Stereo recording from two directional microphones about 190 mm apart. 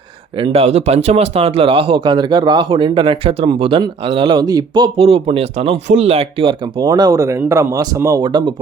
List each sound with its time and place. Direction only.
0.3 s speech: 30° right (ahead or behind)